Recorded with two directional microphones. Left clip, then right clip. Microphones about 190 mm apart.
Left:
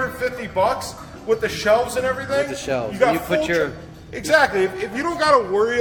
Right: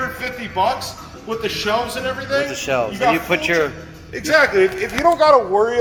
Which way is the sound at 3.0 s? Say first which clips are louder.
Left 2 dB; 50° left (ahead or behind).